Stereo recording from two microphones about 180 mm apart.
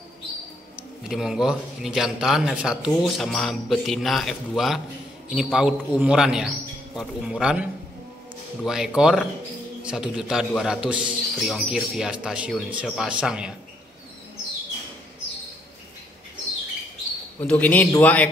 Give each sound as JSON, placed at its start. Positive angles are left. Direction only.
{"t": 1.0, "sound": "a man's voice", "side_deg": 0}
{"t": 8.6, "sound": "a man's voice", "side_deg": -5}
{"t": 17.4, "sound": "a man's voice", "side_deg": 10}